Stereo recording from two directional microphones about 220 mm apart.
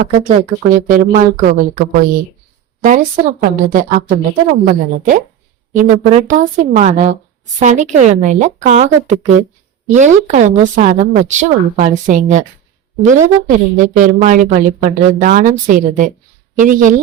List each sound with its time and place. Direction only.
0.1 s a woman's voice: 35° right (ahead or behind)
3.4 s a woman's voice: 35° right (ahead or behind)